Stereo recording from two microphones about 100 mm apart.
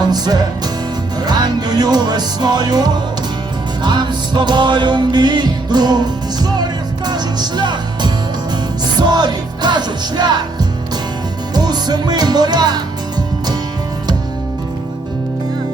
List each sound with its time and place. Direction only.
0.0 s music: 40° right (ahead or behind)